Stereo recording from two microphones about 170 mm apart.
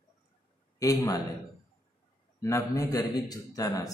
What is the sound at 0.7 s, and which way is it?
Speech, 20° left (ahead or behind).